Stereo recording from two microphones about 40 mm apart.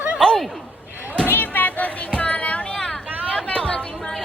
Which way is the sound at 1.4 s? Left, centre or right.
Left.